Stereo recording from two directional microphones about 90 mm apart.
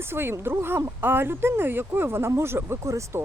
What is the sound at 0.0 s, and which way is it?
Speech, 25° right (ahead or behind).